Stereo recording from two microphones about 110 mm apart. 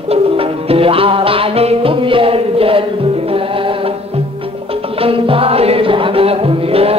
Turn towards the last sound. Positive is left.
turn(degrees=-60)  # may be behind; listen again after turning